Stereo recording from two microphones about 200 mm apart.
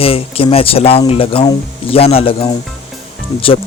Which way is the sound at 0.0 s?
30° left (ahead or behind).